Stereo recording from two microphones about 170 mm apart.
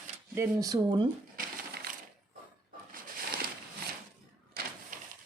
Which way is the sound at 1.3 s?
60° right (ahead or behind).